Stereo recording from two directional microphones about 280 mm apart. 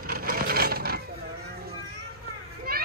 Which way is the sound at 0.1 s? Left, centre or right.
Right.